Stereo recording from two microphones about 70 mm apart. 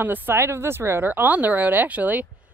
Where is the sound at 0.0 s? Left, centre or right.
Right.